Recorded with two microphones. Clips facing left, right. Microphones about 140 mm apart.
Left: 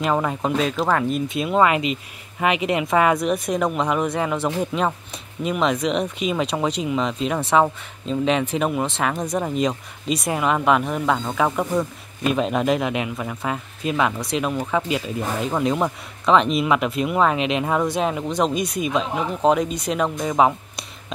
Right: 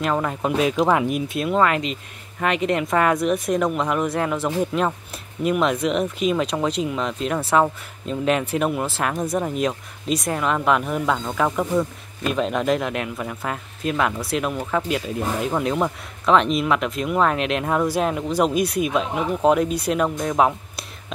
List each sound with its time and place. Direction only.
0.0 s speech: 5° left (ahead or behind)
0.6 s speech: 10° right (ahead or behind)
1.4 s speech: 5° left (ahead or behind)